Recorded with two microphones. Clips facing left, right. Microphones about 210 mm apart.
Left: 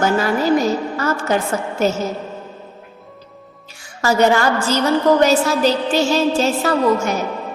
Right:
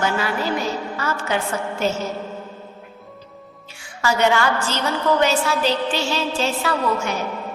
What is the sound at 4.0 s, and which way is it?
A woman's voice, 40° left (ahead or behind).